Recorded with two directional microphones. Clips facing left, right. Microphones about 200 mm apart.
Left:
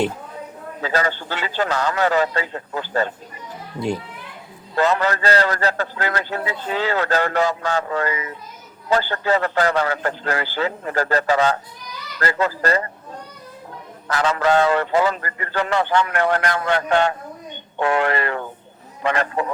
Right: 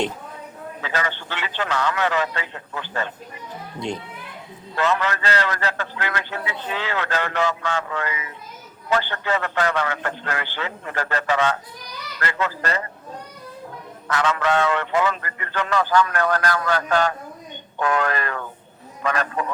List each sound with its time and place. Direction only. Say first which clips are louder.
0.8 s a man's voice: left 5 dB; 40° left (ahead or behind)
3.8 s a child's voice: left 5 dB; 5° left (ahead or behind)
4.7 s a man's voice: left 3 dB; 35° left (ahead or behind)
14.1 s a man's voice: left 3 dB; 35° left (ahead or behind)